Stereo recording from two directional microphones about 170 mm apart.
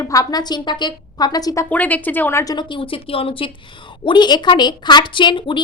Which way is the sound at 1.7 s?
10° left (ahead or behind).